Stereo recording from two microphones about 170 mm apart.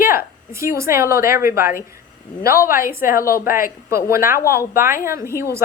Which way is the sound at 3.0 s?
55° left (ahead or behind).